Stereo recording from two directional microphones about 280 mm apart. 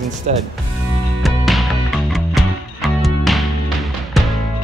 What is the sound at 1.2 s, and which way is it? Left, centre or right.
Music, centre.